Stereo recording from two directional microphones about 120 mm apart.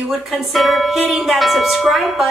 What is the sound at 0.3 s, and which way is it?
Speech, centre (ahead or behind).